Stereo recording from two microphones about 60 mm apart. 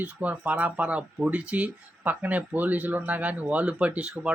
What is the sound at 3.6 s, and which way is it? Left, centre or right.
Speech, centre.